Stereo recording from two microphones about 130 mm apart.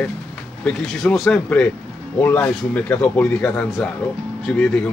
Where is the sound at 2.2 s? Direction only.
15° left (ahead or behind).